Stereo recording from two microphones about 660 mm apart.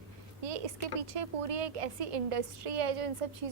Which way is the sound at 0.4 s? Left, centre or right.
Right.